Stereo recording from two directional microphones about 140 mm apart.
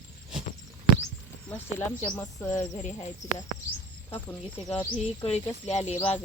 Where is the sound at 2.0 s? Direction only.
25° left (ahead or behind).